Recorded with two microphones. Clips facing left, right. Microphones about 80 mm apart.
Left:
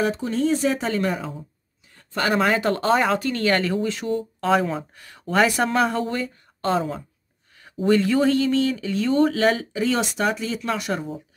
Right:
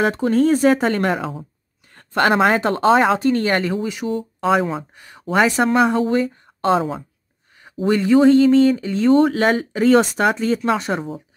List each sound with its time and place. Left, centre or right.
0.0 s speech: right
1.9 s speech: right
3.8 s speech: centre
4.9 s a sound: centre
5.2 s speech: centre
6.3 s a sound: right
7.7 s speech: centre; by 9.1 s right
9.1 s speech: right